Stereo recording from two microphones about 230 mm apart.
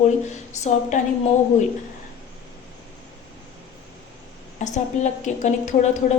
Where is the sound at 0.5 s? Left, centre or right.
Left.